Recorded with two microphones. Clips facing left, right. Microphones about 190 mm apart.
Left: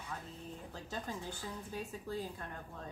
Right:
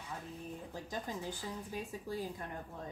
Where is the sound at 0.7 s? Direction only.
15° right (ahead or behind).